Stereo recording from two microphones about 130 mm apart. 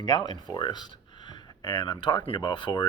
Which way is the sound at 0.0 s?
35° left (ahead or behind).